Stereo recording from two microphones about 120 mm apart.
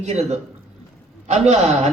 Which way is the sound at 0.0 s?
65° right (ahead or behind).